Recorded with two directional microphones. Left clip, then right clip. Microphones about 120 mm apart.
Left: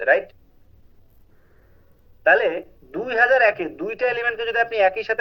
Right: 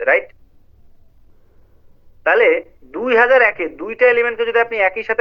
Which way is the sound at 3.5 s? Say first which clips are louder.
Right 5 dB; 25° left (ahead or behind).